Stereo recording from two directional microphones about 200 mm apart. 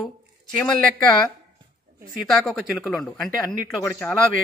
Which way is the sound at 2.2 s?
Centre (ahead or behind).